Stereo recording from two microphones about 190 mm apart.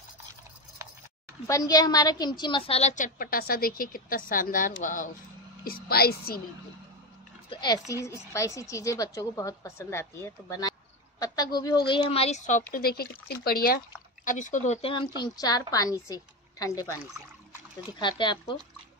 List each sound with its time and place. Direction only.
1.5 s a woman's voice: 20° left (ahead or behind); by 6.4 s 55° left (ahead or behind)
7.4 s a woman's voice: 20° left (ahead or behind); by 12.6 s 40° left (ahead or behind)
12.7 s a woman's voice: 55° left (ahead or behind); by 18.6 s 25° left (ahead or behind)